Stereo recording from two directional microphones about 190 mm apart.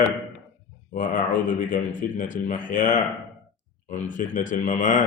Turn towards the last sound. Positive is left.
turn(degrees=40)  # may be behind; listen again after turning